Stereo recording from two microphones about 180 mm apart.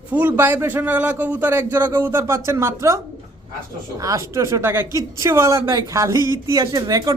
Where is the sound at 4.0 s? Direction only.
15° right (ahead or behind).